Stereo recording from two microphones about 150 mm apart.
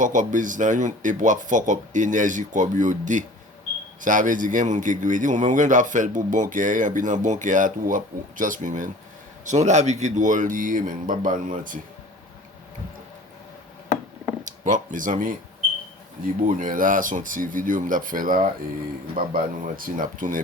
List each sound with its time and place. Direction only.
0.0 s a man's voice: 60° right (ahead or behind)
14.4 s a man's voice: 55° right (ahead or behind)